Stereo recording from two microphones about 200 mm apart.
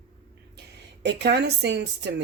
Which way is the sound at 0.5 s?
60° right (ahead or behind).